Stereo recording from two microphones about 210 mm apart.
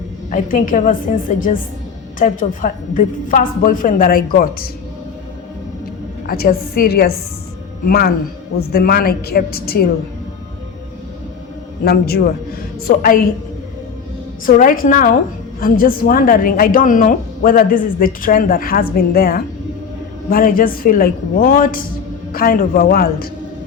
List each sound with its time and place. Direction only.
0.3 s a woman's voice: 40° left (ahead or behind)
6.2 s a woman's voice: 45° left (ahead or behind)
11.9 s a woman's voice: 45° left (ahead or behind)
14.4 s a woman's voice: 40° left (ahead or behind)